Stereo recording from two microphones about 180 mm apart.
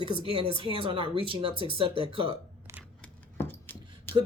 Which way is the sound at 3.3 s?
10° left (ahead or behind).